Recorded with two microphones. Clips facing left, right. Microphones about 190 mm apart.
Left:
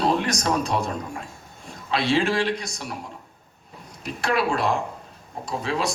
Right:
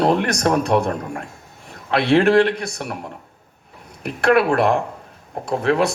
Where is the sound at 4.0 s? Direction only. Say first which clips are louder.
Right 8 dB; 60° right (ahead or behind).